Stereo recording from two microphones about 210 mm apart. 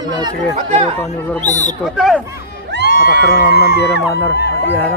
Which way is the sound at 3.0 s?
55° right (ahead or behind).